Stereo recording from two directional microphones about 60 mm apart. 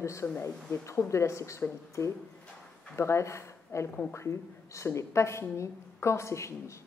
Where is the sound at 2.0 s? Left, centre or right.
Left.